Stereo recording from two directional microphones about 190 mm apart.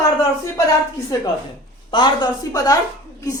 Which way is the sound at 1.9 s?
25° left (ahead or behind).